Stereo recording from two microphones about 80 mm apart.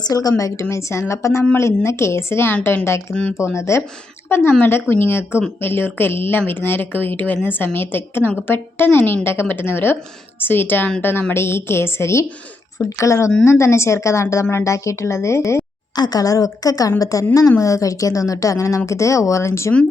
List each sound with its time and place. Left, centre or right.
0.0 s a woman's voice: left
16.0 s a woman's voice: left